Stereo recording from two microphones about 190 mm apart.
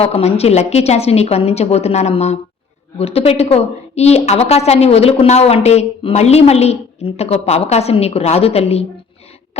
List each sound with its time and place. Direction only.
0.0 s a woman's voice: 35° left (ahead or behind)